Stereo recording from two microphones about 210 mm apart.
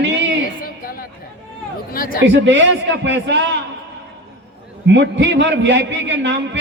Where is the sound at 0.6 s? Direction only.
45° left (ahead or behind).